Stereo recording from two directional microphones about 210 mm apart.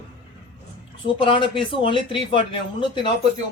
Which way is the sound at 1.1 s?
25° left (ahead or behind).